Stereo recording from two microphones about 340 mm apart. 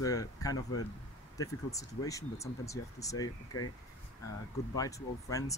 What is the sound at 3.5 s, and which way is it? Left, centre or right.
Speech, left.